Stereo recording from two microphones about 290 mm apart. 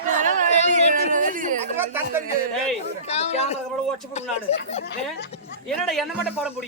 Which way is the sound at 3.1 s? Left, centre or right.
Left.